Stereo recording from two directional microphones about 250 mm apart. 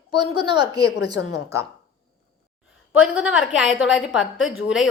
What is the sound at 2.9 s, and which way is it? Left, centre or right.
A woman's voice, centre.